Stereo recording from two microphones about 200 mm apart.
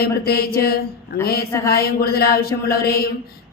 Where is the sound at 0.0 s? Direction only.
50° left (ahead or behind).